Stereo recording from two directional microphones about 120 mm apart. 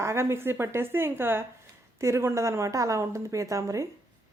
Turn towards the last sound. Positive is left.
turn(degrees=-25)  # may be behind; listen again after turning